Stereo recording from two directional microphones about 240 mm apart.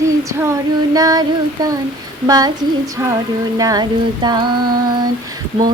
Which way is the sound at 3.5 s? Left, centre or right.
Centre.